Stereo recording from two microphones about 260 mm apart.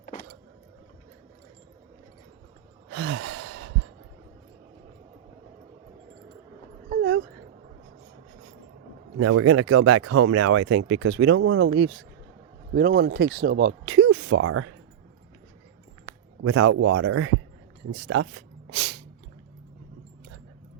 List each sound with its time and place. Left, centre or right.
0.0 s vehicle: left
2.9 s gasp: right
3.2 s sigh: right
6.9 s a sound: right
9.1 s speech: right
14.1 s speech: right
16.1 s a sound: left
16.4 s speech: right
17.9 s a sound: right